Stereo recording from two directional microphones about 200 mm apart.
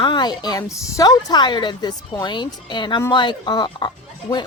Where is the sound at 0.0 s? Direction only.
20° left (ahead or behind).